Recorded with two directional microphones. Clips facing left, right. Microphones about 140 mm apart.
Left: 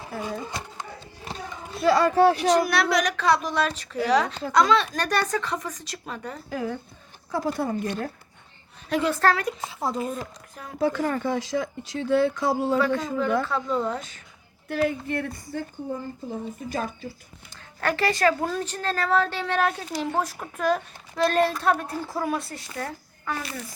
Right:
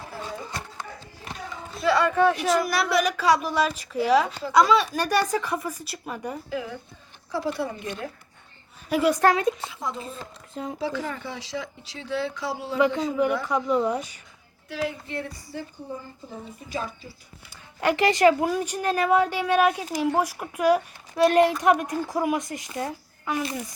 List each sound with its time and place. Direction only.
0.2 s a sound: 15° left (ahead or behind)
1.3 s a sound: 30° left (ahead or behind)
1.8 s speech: 35° left (ahead or behind)
2.6 s a woman's voice: centre (ahead or behind)
6.5 s speech: 45° left (ahead or behind)
8.9 s a woman's voice: 10° right (ahead or behind)
9.6 s speech: 35° left (ahead or behind)
10.5 s speech: 25° right (ahead or behind)
10.8 s speech: 50° left (ahead or behind)
13.4 s a woman's voice: 15° right (ahead or behind)
14.7 s speech: 50° left (ahead or behind)
16.6 s speech: 50° left (ahead or behind)
17.5 s a woman's voice: 15° right (ahead or behind)